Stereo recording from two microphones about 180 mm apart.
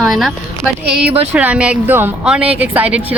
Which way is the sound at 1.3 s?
5° right (ahead or behind).